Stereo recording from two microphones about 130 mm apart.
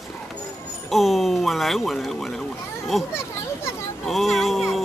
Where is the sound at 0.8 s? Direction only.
Centre (ahead or behind).